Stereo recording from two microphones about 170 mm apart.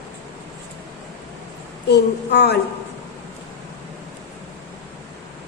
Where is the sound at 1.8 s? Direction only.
75° left (ahead or behind).